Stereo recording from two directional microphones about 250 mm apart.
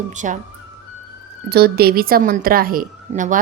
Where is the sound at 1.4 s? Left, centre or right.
Right.